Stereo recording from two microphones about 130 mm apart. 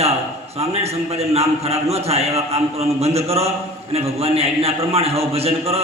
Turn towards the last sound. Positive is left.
turn(degrees=-50)  # may be behind; listen again after turning